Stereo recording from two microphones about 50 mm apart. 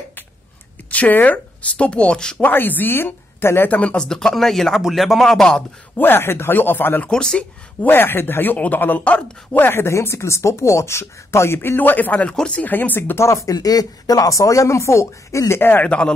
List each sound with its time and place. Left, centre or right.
0.8 s speech: left
1.9 s speech: left
2.4 s speech: left
3.6 s speech: left
3.9 s speech: centre
5.9 s speech: left
7.1 s speech: centre
7.8 s speech: left
9.6 s speech: left
12.3 s speech: left
12.6 s speech: left
13.1 s speech: left
15.8 s speech: left